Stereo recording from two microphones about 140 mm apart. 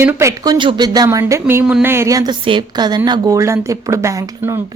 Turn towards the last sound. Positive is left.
turn(degrees=-20)  # may be behind; listen again after turning